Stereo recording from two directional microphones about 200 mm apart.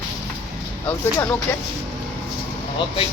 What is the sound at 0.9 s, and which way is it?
Speech, 10° left (ahead or behind).